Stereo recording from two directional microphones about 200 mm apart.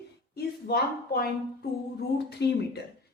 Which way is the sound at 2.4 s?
60° left (ahead or behind).